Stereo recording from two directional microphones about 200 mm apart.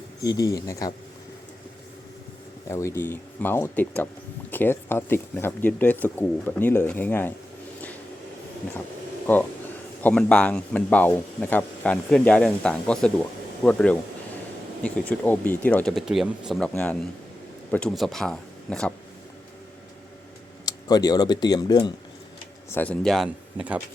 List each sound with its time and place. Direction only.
0.2 s speech: 15° left (ahead or behind)
2.6 s speech: 15° left (ahead or behind)
9.2 s speech: 10° left (ahead or behind)
20.7 s speech: 20° left (ahead or behind)
22.7 s speech: 5° left (ahead or behind)